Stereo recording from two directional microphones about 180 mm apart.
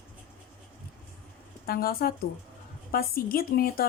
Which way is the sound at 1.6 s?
55° left (ahead or behind).